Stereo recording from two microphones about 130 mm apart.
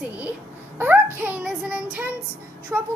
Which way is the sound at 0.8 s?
15° right (ahead or behind).